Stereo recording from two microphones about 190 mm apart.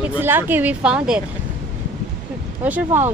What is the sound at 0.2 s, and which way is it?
Speech, 10° right (ahead or behind).